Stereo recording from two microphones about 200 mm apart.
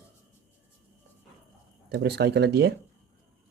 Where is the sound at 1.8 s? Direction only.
55° right (ahead or behind).